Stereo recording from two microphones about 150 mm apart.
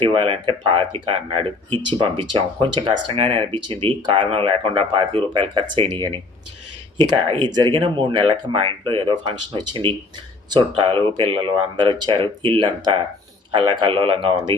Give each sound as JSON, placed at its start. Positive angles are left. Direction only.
{"t": 0.0, "sound": "speech", "side_deg": -35}